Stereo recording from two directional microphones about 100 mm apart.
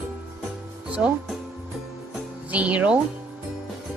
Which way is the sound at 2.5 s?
15° right (ahead or behind).